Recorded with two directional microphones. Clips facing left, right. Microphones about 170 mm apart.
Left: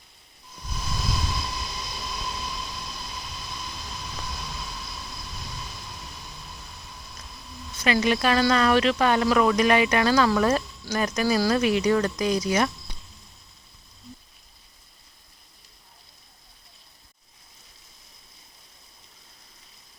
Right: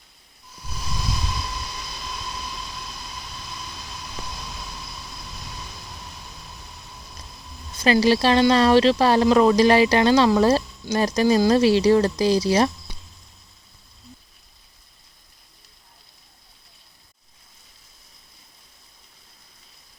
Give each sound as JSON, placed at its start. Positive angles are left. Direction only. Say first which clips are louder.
{"t": 7.8, "sound": "a woman's voice", "louder": "right 5 dB", "side_deg": -30}